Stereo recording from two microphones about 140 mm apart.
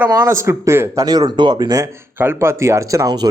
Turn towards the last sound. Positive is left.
turn(degrees=-20)  # may be behind; listen again after turning